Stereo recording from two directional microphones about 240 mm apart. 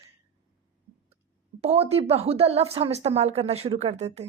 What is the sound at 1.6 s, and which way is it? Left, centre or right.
Speech, right.